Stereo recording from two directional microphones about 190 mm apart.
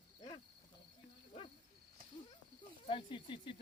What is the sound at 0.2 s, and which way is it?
Cricket, 25° left (ahead or behind).